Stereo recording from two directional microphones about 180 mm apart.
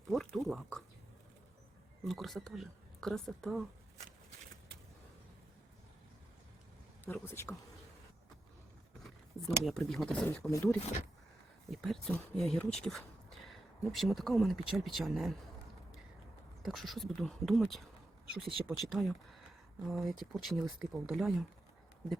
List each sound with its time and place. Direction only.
0.1 s a sound: centre (ahead or behind)
2.0 s speech: centre (ahead or behind)
7.0 s speech: 15° left (ahead or behind)
9.0 s speech: centre (ahead or behind)
10.8 s speech: 40° left (ahead or behind)
11.7 s speech: centre (ahead or behind)
16.6 s speech: centre (ahead or behind)